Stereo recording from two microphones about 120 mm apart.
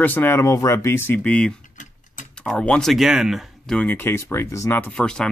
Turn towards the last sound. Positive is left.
turn(degrees=5)  # may be behind; listen again after turning